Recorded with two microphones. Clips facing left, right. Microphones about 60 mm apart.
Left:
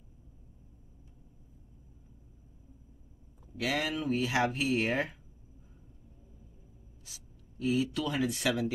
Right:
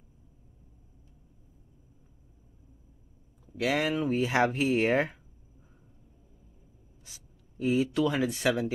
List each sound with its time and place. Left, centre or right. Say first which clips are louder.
3.5 s speech: right 5 dB; right
7.1 s speech: even; right